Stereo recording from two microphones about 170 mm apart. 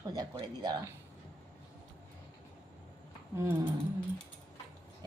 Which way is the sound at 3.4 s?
15° right (ahead or behind).